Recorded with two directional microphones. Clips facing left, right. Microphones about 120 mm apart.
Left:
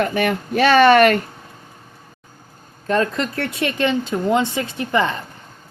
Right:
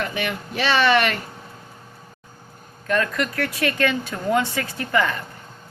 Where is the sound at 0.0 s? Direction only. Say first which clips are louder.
Left 7 dB; 45° left (ahead or behind).